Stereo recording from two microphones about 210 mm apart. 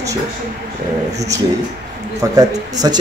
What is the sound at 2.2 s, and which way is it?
Speech, 15° right (ahead or behind).